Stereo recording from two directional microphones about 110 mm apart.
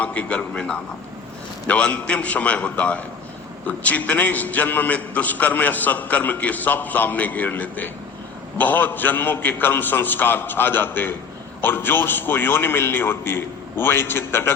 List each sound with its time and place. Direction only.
0.0 s a man's voice: 10° left (ahead or behind)